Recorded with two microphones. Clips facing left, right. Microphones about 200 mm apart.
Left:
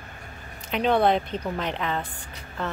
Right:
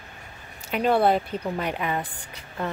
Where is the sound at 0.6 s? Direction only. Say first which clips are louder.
Even; 5° right (ahead or behind).